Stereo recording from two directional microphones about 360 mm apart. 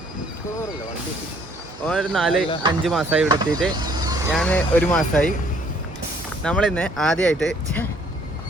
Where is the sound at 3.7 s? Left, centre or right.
Centre.